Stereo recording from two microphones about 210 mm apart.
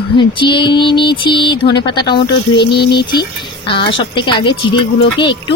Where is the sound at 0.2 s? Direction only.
20° left (ahead or behind).